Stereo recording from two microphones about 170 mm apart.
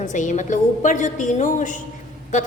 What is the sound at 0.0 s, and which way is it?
A woman's voice, 45° left (ahead or behind).